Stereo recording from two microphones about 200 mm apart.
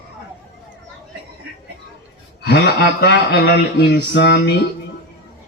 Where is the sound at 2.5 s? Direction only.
55° left (ahead or behind).